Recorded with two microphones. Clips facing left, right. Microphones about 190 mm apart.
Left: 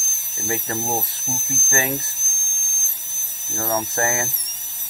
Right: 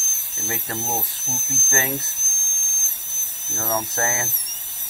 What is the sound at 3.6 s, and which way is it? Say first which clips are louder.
Speech: left 2 dB; 20° left (ahead or behind).